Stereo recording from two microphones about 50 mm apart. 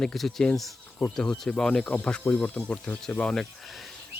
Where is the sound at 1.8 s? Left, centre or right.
Left.